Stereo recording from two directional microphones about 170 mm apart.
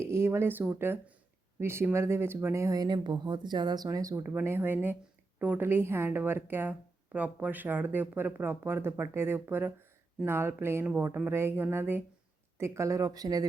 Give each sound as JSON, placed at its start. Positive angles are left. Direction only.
{"t": 0.0, "sound": "a woman's voice", "side_deg": -15}